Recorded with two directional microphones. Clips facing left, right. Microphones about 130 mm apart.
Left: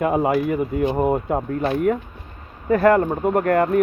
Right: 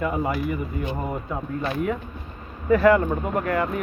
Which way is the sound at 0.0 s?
70° left (ahead or behind).